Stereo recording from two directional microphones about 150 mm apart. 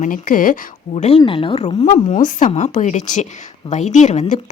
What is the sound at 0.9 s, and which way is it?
A woman's voice, 45° left (ahead or behind).